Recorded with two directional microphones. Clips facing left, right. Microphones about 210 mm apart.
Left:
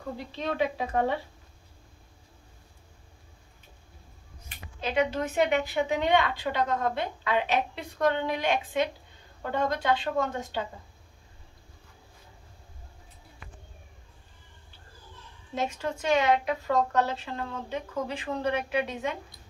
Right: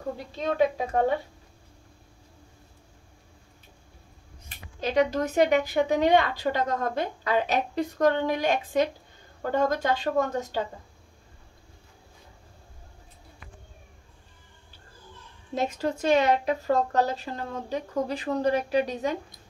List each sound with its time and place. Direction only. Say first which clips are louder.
0.4 s speech: right 4 dB; 45° right (ahead or behind)
4.5 s speech: right 3 dB; 40° right (ahead or behind)
15.5 s speech: right 3 dB; 35° right (ahead or behind)